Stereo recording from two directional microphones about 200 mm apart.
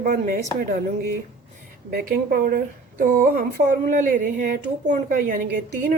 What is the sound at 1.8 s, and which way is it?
A woman's voice, 45° right (ahead or behind).